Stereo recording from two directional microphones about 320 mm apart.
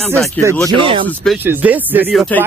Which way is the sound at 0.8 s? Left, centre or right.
Centre.